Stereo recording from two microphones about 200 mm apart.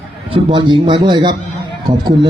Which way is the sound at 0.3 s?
25° right (ahead or behind).